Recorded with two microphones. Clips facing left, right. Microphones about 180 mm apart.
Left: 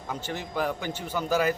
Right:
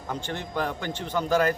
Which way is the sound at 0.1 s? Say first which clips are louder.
Right 1 dB; 5° left (ahead or behind).